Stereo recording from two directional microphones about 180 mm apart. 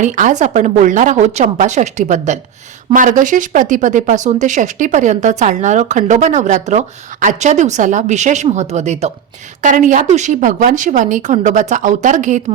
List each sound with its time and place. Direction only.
0.0 s speech: 45° right (ahead or behind)